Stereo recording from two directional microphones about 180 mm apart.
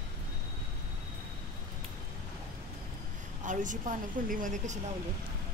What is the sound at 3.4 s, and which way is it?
A woman's voice, 45° right (ahead or behind).